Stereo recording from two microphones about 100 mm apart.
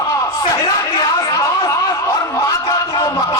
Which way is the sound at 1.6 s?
35° left (ahead or behind).